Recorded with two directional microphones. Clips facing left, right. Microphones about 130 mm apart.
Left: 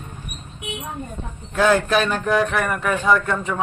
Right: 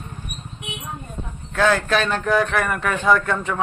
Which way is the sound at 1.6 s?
15° left (ahead or behind).